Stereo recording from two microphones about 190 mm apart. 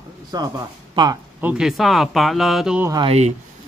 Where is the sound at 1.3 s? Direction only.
5° right (ahead or behind).